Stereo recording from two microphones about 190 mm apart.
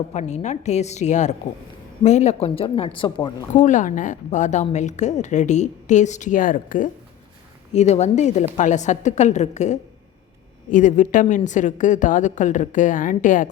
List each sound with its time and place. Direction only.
0.1 s a woman's voice: 35° left (ahead or behind)
3.5 s a woman's voice: 40° left (ahead or behind)